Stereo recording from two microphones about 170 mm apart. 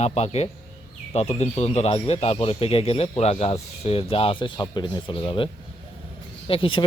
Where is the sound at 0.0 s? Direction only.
40° left (ahead or behind).